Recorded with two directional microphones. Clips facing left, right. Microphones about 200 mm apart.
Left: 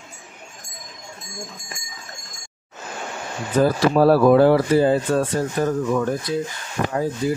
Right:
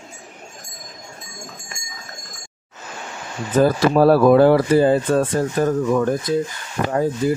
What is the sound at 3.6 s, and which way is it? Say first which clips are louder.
Speech: right 2 dB; 50° right (ahead or behind).